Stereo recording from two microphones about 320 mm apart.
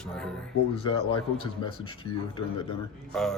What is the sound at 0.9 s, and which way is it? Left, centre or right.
Speech, centre.